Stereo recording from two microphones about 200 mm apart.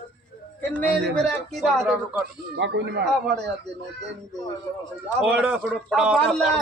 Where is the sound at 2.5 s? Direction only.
60° right (ahead or behind).